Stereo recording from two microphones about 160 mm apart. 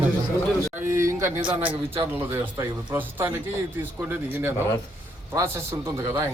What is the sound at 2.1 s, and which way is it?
Speech, 15° right (ahead or behind).